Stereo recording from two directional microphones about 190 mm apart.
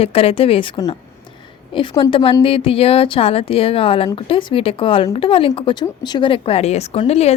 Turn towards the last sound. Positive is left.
turn(degrees=35)  # may be behind; listen again after turning